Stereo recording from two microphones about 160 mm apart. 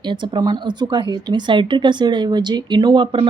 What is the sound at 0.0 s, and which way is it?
Speech, 30° right (ahead or behind).